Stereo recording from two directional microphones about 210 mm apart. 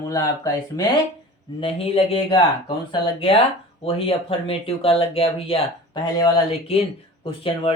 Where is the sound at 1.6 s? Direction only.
25° left (ahead or behind).